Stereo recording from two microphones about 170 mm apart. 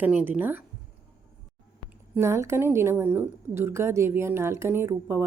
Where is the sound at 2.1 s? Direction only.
15° right (ahead or behind).